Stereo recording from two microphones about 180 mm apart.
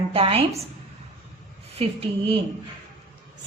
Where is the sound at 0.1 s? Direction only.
35° right (ahead or behind).